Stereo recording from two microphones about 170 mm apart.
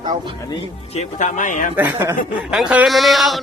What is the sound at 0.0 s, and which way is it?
Speech, 25° right (ahead or behind).